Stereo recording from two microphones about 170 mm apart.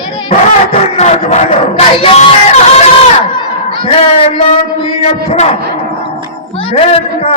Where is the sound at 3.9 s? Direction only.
35° left (ahead or behind).